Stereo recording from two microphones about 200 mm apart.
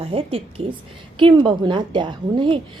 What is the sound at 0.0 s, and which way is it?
Speech, 30° right (ahead or behind).